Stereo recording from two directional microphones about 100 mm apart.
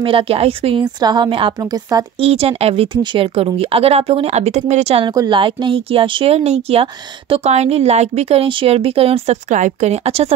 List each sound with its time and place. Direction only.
0.0 s speech: 65° right (ahead or behind)
1.0 s a woman's voice: 50° right (ahead or behind)
1.6 s speech: 35° right (ahead or behind)
2.1 s speech: 90° right; by 3.3 s 55° right (ahead or behind)
3.3 s speech: 75° right (ahead or behind); by 5.0 s 90° right
5.3 s speech: 60° right (ahead or behind); by 10.3 s 90° right